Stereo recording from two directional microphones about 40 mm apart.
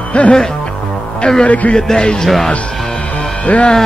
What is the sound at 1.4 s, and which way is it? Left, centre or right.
Speech, left.